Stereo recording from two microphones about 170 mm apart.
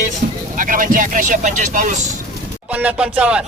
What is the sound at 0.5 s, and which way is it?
Speech, 50° right (ahead or behind).